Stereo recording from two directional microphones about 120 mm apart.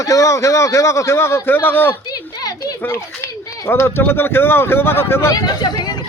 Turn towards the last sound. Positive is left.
turn(degrees=35)  # may be behind; listen again after turning